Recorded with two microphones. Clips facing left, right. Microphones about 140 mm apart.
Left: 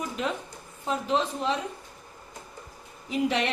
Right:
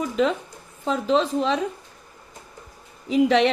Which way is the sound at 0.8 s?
90° right.